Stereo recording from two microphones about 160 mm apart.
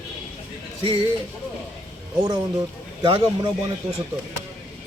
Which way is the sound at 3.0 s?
30° right (ahead or behind).